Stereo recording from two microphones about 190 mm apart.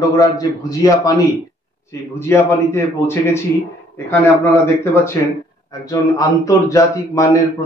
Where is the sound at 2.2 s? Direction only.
15° left (ahead or behind).